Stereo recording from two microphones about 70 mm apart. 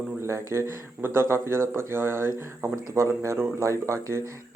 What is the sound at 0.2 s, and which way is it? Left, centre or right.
Speech, right.